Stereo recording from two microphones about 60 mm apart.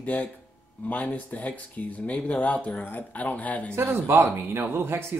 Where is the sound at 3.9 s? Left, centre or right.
Right.